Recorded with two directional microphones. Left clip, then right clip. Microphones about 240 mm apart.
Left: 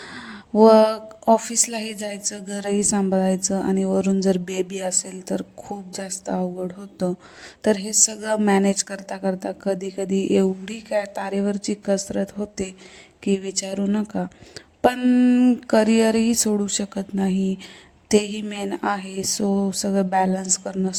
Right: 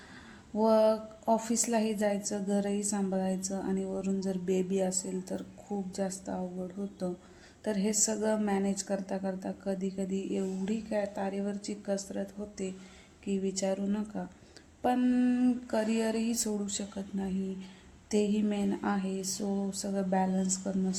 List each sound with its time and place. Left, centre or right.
0.1 s a sound: left
2.0 s speech: left
7.6 s speech: left